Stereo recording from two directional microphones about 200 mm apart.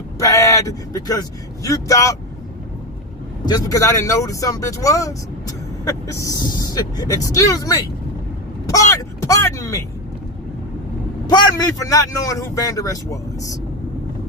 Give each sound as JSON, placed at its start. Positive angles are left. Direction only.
{"t": 0.2, "sound": "speech", "side_deg": 15}
{"t": 3.4, "sound": "speech", "side_deg": 20}
{"t": 8.6, "sound": "a sound", "side_deg": 15}
{"t": 11.2, "sound": "speech", "side_deg": 20}